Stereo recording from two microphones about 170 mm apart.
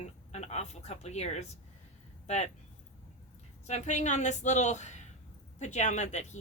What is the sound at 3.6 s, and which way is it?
Speech, 40° left (ahead or behind).